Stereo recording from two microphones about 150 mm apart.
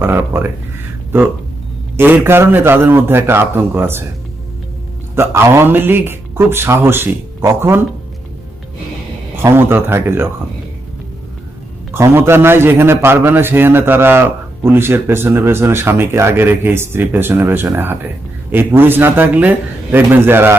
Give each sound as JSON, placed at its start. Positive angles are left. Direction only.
{"t": 0.0, "sound": "a man's voice", "side_deg": -15}
{"t": 2.0, "sound": "a man's voice", "side_deg": -15}
{"t": 5.1, "sound": "a man's voice", "side_deg": -15}
{"t": 9.3, "sound": "a man's voice", "side_deg": -15}
{"t": 11.9, "sound": "a man's voice", "side_deg": -20}